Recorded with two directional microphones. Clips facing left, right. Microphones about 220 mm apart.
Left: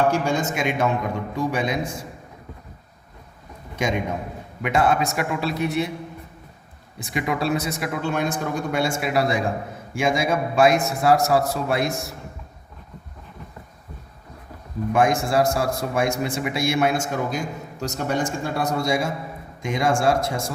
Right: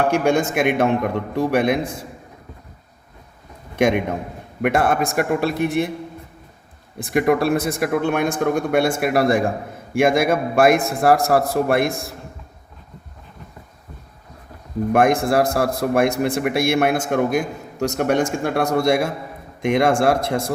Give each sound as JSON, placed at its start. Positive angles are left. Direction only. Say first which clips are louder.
{"t": 0.1, "sound": "a man's voice", "louder": "right 5 dB", "side_deg": -60}
{"t": 3.8, "sound": "a man's voice", "louder": "right 6 dB", "side_deg": -60}
{"t": 7.0, "sound": "a man's voice", "louder": "right 7 dB", "side_deg": -55}
{"t": 14.9, "sound": "a man's voice", "louder": "right 3 dB", "side_deg": -60}